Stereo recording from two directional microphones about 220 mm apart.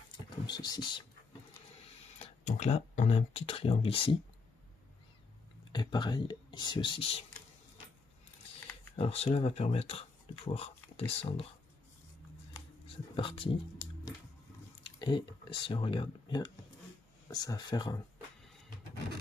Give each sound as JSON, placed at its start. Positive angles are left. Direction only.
{"t": 0.5, "sound": "speech", "side_deg": 20}
{"t": 2.1, "sound": "speech", "side_deg": 30}
{"t": 5.7, "sound": "speech", "side_deg": 20}
{"t": 8.9, "sound": "speech", "side_deg": 25}
{"t": 12.8, "sound": "speech", "side_deg": 25}
{"t": 15.0, "sound": "speech", "side_deg": 20}